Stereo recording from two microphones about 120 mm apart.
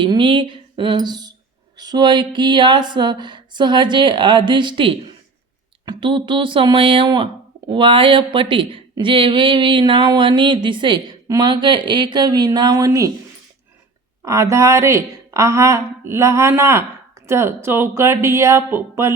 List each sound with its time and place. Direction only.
0.0 s speech: 45° right (ahead or behind); by 13.1 s 25° right (ahead or behind)
14.2 s speech: 25° right (ahead or behind)